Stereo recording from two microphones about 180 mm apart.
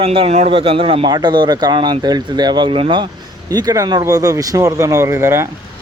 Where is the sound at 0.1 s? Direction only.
35° right (ahead or behind).